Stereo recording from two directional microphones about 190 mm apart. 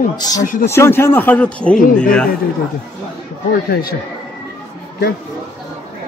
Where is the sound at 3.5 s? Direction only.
50° left (ahead or behind).